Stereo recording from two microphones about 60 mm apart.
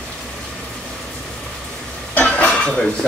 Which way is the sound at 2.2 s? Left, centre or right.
Left.